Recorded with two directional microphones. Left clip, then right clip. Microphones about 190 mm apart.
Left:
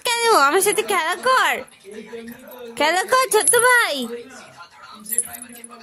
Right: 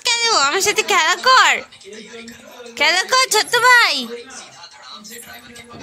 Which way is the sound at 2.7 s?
30° left (ahead or behind).